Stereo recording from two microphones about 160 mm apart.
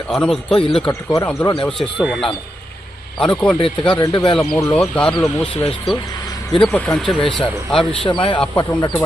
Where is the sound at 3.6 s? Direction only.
35° left (ahead or behind).